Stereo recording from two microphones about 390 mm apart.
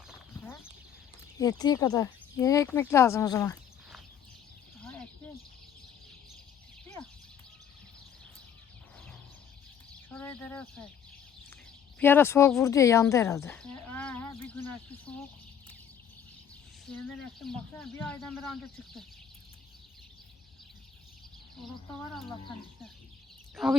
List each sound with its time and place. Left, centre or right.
1.4 s speech: centre
4.8 s a sound: centre
10.1 s chicken: centre
11.9 s speech: centre
16.9 s speech: centre
23.6 s speech: centre